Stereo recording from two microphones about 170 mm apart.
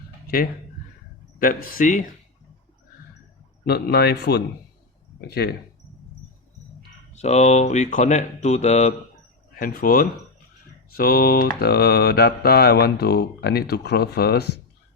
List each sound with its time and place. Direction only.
1.4 s speech: 55° left (ahead or behind)
3.7 s mantra: 70° left (ahead or behind)
7.1 s speech: 40° left (ahead or behind)
9.6 s speech: 55° left (ahead or behind)
10.9 s mantra: 60° left (ahead or behind)